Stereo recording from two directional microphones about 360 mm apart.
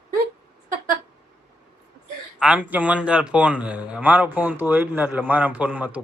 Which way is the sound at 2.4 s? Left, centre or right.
Centre.